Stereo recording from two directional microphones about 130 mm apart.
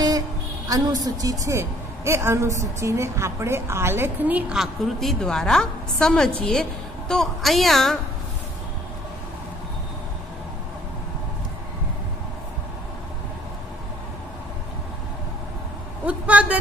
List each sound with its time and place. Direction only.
0.7 s a woman's voice: 25° right (ahead or behind); by 8.0 s centre (ahead or behind)
16.1 s vehicle: 10° right (ahead or behind)